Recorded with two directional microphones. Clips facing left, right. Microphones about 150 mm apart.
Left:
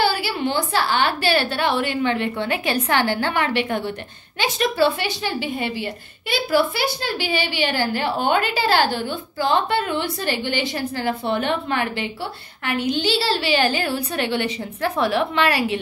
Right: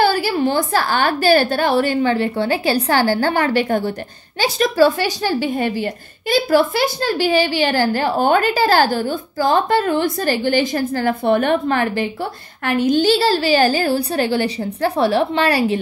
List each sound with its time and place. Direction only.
0.0 s a woman's voice: 45° right (ahead or behind)